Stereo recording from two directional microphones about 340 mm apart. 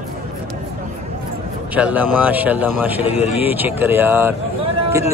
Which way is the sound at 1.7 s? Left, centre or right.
Centre.